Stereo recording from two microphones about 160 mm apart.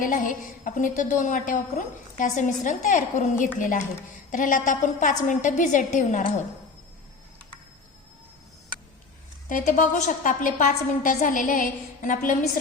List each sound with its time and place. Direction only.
0.0 s a woman's voice: 55° left (ahead or behind)
9.5 s a woman's voice: 50° left (ahead or behind)